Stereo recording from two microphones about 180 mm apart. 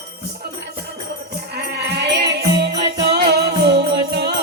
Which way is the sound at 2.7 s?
25° right (ahead or behind).